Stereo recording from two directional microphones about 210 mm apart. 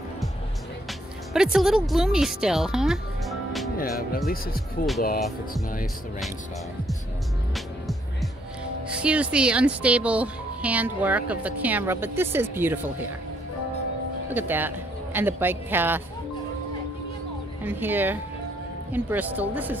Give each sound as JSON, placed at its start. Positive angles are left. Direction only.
{"t": 0.8, "sound": "music", "side_deg": -5}
{"t": 1.9, "sound": "speech", "side_deg": 0}
{"t": 3.7, "sound": "speech", "side_deg": 45}
{"t": 7.5, "sound": "music", "side_deg": 0}
{"t": 9.0, "sound": "speech", "side_deg": -5}
{"t": 14.3, "sound": "speech", "side_deg": -10}
{"t": 17.6, "sound": "speech", "side_deg": -10}